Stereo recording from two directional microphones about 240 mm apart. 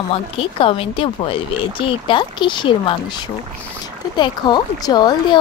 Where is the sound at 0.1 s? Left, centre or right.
Left.